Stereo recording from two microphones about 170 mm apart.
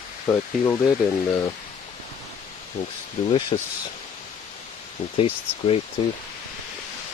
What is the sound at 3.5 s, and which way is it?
Speech, 30° left (ahead or behind).